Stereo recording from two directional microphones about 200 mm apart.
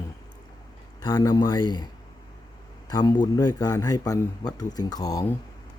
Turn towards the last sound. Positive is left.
turn(degrees=20)  # may be behind; listen again after turning